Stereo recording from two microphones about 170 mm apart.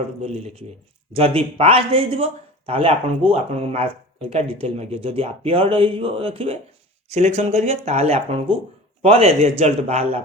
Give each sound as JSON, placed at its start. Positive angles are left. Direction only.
{"t": 0.2, "sound": "speech", "side_deg": -35}